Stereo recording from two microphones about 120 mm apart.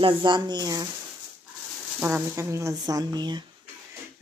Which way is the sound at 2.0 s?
20° right (ahead or behind).